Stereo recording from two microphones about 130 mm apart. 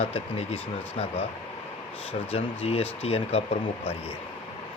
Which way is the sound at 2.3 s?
50° left (ahead or behind).